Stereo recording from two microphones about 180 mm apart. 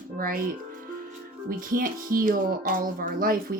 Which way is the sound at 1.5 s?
50° right (ahead or behind).